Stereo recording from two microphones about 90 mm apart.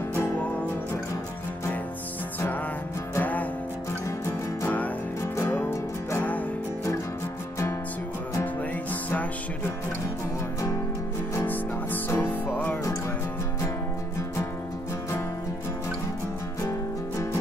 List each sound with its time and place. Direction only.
3.2 s music: 20° left (ahead or behind)
4.6 s music: 15° left (ahead or behind)
12.2 s music: 20° left (ahead or behind)